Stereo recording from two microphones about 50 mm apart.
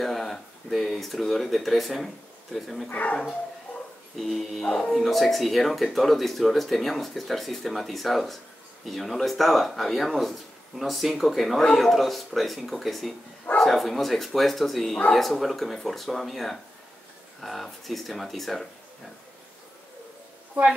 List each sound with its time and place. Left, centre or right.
0.0 s speech: centre
2.9 s speech: left
4.2 s speech: centre